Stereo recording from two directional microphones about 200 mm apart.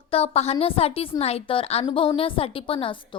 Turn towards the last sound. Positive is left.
turn(degrees=25)  # may be behind; listen again after turning